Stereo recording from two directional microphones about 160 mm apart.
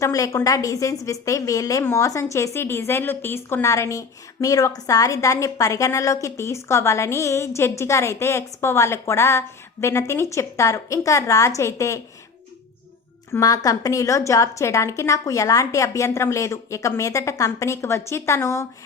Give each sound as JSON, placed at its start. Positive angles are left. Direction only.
{"t": 0.0, "sound": "a woman's voice", "side_deg": 20}
{"t": 13.3, "sound": "a woman's voice", "side_deg": 20}